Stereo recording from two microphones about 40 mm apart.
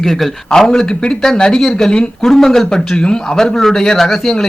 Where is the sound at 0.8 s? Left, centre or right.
Centre.